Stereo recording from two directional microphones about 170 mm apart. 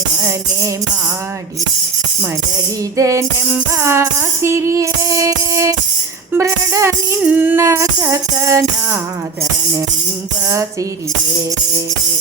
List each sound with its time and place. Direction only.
3.0 s music: 20° right (ahead or behind)